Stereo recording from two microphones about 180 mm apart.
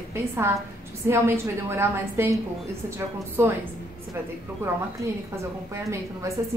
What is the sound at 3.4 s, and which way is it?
Speech, 15° right (ahead or behind).